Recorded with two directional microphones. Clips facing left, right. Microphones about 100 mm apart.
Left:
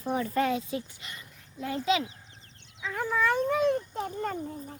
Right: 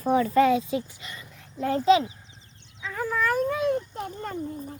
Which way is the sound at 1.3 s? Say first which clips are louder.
Right 8 dB; 85° right.